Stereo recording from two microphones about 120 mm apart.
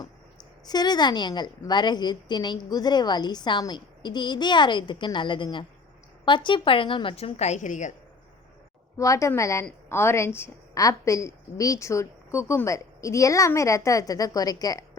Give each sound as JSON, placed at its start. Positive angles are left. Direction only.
{"t": 0.6, "sound": "a woman's voice", "side_deg": 35}
{"t": 9.0, "sound": "a woman's voice", "side_deg": 25}